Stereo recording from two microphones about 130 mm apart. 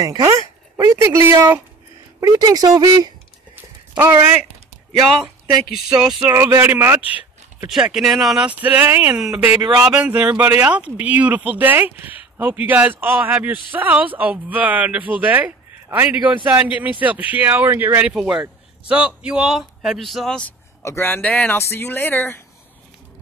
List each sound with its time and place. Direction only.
0.0 s speech: 30° right (ahead or behind)
2.1 s speech: 30° right (ahead or behind)
5.9 s speech: 5° right (ahead or behind)
6.3 s speech: 15° right (ahead or behind)
7.7 s speech: 5° right (ahead or behind)
8.5 s a man's voice: 15° right (ahead or behind); by 20.5 s 5° left (ahead or behind)
20.8 s speech: 20° left (ahead or behind)